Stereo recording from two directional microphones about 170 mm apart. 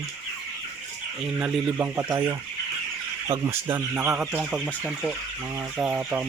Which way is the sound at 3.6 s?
10° right (ahead or behind).